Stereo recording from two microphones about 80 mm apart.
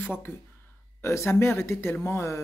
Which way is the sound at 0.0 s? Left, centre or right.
Left.